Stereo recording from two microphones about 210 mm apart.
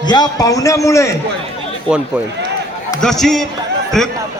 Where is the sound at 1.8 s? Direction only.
5° right (ahead or behind).